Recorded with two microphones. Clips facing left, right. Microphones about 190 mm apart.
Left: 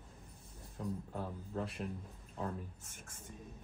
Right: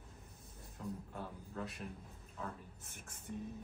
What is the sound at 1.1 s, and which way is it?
Speech, 30° left (ahead or behind).